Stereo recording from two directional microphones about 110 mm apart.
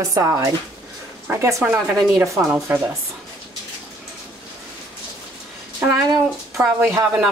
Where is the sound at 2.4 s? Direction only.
15° right (ahead or behind).